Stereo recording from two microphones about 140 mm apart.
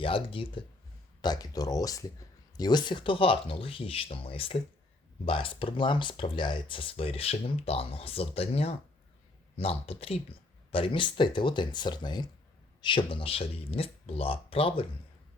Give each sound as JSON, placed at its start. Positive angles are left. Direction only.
{"t": 0.0, "sound": "speech", "side_deg": 40}